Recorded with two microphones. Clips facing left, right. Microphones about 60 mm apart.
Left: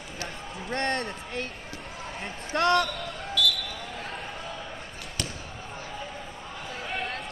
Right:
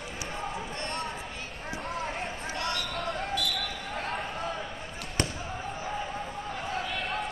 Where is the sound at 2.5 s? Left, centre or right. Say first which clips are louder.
Left 12 dB; left.